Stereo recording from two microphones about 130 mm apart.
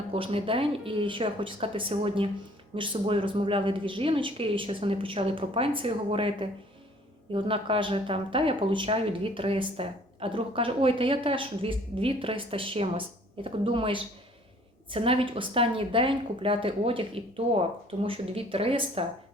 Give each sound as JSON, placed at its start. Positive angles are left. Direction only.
{"t": 0.1, "sound": "speech", "side_deg": -45}